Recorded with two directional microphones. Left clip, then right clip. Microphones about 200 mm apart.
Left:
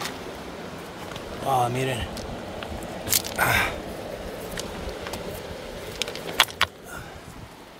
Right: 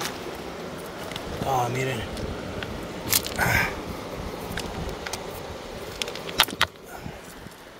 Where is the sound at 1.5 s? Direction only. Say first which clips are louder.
Left 2 dB; 15° left (ahead or behind).